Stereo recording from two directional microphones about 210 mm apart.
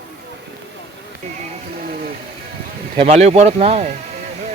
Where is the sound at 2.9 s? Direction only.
30° right (ahead or behind).